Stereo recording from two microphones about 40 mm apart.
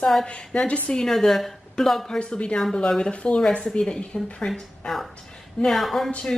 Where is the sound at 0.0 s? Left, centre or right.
Centre.